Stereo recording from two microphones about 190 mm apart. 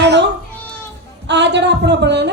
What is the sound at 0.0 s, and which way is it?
Cat, 65° right (ahead or behind).